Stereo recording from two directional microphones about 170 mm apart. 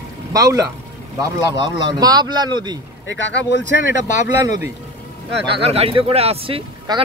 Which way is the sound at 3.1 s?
80° left.